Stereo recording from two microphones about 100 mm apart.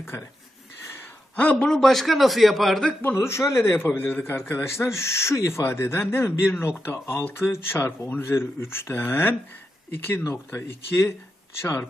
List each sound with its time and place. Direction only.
0.0 s speech: 25° left (ahead or behind)
0.9 s a sound: 15° left (ahead or behind)
1.7 s a man's voice: 5° left (ahead or behind)
3.0 s speech: 25° left (ahead or behind)